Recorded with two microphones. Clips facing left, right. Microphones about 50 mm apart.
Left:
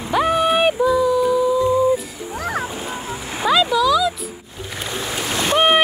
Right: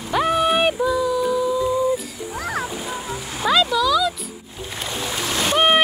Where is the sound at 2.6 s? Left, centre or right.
Left.